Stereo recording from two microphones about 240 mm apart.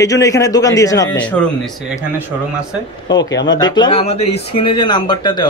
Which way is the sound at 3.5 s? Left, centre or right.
Centre.